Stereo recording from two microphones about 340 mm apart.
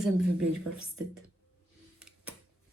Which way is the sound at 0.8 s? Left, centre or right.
Right.